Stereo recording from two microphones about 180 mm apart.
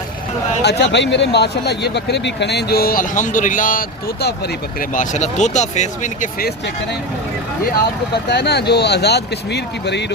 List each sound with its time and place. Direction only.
0.6 s speech: 70° left (ahead or behind)
4.8 s speech: 45° left (ahead or behind)
8.1 s speech: 65° left (ahead or behind)